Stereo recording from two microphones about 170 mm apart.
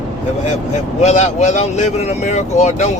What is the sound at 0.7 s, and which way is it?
Speech, 40° left (ahead or behind).